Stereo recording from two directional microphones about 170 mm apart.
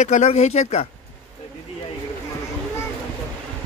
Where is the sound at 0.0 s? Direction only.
45° left (ahead or behind).